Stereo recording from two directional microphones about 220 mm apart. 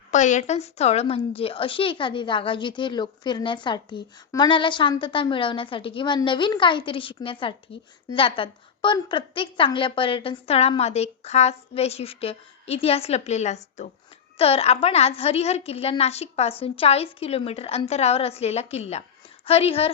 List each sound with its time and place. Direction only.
0.1 s a woman's voice: 35° left (ahead or behind)